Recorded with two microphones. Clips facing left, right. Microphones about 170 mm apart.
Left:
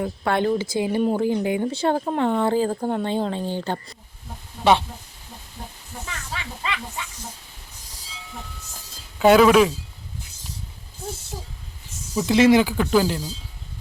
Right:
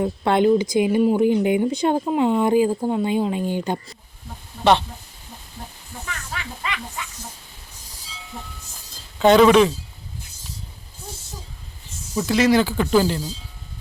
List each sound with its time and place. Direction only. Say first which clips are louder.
0.0 s speech: right 4 dB; 20° right (ahead or behind)
6.3 s speech: left 1 dB; 25° left (ahead or behind)
9.1 s speech: right 1 dB; 5° left (ahead or behind)
12.2 s speech: left 2 dB; 25° left (ahead or behind)
12.7 s speech: right 1 dB; centre (ahead or behind)